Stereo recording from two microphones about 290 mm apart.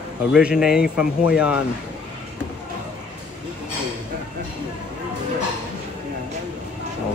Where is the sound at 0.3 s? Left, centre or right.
Centre.